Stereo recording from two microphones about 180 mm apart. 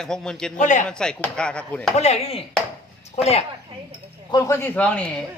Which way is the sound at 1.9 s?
35° left (ahead or behind).